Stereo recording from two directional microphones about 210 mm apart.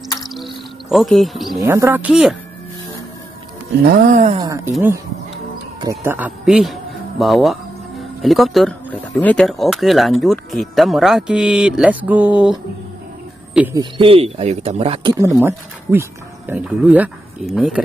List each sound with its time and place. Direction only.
0.3 s insect: centre (ahead or behind)
1.6 s speech: 10° right (ahead or behind)
3.8 s a sound: 45° right (ahead or behind)
4.7 s a man's voice: 10° right (ahead or behind)
13.7 s speech: 25° right (ahead or behind)
15.1 s speech: 10° right (ahead or behind)